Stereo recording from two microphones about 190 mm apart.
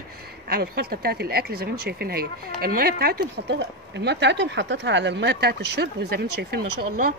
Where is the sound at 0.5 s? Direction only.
55° right (ahead or behind).